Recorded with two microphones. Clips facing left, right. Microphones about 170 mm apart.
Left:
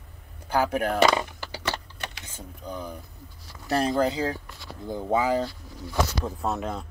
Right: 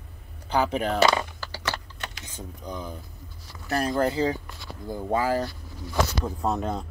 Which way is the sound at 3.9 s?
15° left (ahead or behind).